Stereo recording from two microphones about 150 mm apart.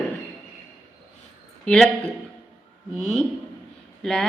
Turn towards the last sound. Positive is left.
turn(degrees=0)  # may be behind; listen again after turning